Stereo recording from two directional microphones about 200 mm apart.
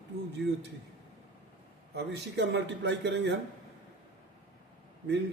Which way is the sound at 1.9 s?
55° right (ahead or behind).